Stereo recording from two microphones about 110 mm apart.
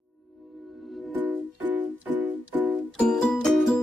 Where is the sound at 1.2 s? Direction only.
15° right (ahead or behind).